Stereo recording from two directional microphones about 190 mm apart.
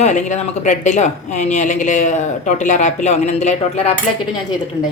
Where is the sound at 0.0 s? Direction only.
40° left (ahead or behind).